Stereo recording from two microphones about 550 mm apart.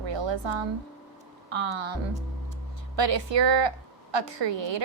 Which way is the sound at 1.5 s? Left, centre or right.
Right.